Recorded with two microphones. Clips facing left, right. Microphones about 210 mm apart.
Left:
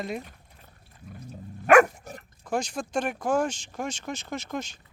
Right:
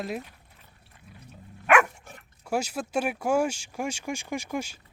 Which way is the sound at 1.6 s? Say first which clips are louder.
Left 5 dB; 40° left (ahead or behind).